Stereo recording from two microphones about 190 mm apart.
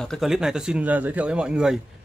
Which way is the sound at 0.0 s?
Centre (ahead or behind).